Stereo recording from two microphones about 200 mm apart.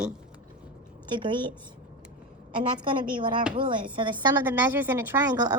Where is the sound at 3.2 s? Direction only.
25° right (ahead or behind).